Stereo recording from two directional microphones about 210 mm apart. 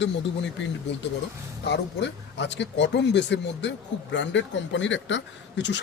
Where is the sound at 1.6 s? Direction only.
55° left (ahead or behind).